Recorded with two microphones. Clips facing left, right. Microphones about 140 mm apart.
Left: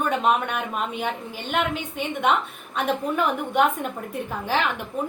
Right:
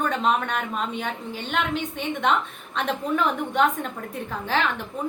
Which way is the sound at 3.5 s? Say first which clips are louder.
Left 3 dB; 10° left (ahead or behind).